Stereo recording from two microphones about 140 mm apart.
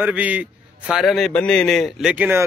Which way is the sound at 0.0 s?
10° right (ahead or behind).